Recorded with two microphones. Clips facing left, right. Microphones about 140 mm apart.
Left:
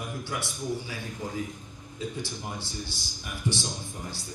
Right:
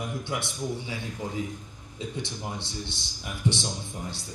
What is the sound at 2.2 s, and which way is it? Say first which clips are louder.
Speech: right 1 dB; 25° right (ahead or behind).